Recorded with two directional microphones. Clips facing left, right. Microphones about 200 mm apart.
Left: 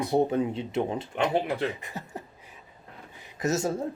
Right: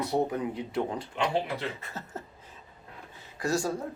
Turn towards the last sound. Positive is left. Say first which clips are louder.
# left 2 dB
turn(degrees=20)  # may be behind; listen again after turning